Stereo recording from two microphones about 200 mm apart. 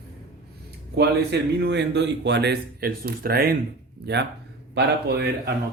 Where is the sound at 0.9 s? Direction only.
55° right (ahead or behind).